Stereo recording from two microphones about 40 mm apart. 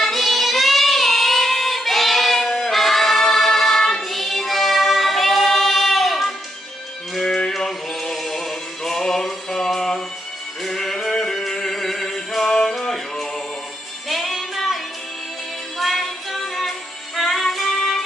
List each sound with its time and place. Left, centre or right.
0.0 s child singing: centre
2.4 s singing: centre
7.3 s music: centre
14.1 s music: centre
15.8 s music: centre